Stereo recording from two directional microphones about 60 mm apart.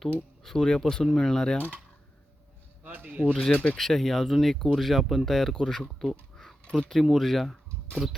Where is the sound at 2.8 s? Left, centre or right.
Right.